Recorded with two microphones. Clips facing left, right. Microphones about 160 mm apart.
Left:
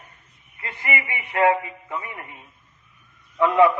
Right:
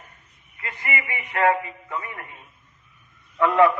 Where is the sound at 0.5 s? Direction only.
30° left (ahead or behind).